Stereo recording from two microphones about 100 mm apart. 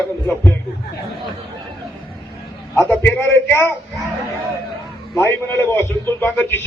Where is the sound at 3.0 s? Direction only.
20° left (ahead or behind).